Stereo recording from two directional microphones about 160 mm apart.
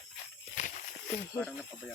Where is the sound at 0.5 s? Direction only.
50° left (ahead or behind).